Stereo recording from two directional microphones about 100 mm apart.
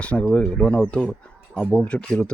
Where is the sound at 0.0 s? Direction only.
15° left (ahead or behind).